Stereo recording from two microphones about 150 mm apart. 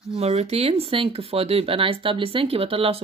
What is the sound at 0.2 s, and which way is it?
Speech, 45° right (ahead or behind).